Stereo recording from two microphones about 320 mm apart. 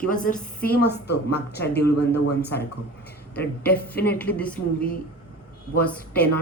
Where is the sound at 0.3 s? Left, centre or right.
Left.